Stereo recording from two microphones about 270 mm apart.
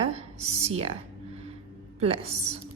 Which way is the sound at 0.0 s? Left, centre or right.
Right.